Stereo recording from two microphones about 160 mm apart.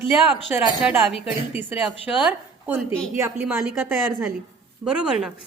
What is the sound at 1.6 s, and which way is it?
A woman's voice, 10° right (ahead or behind).